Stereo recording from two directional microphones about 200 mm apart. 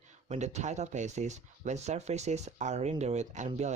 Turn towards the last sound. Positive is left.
turn(degrees=-35)  # may be behind; listen again after turning